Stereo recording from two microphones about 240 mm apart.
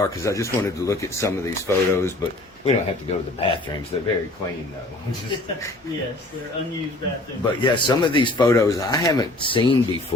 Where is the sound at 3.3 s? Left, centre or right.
Left.